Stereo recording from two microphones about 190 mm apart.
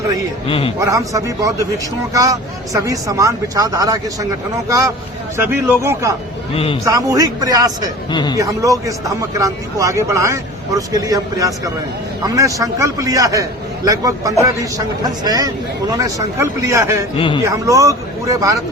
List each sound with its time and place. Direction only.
0.4 s a man's voice: 30° left (ahead or behind)
0.8 s a man's voice: 15° right (ahead or behind)
5.5 s a man's voice: 15° right (ahead or behind)
8.1 s a man's voice: 20° left (ahead or behind)
8.4 s a man's voice: 15° right (ahead or behind)
17.2 s a man's voice: 25° left (ahead or behind)
17.4 s a man's voice: 15° right (ahead or behind)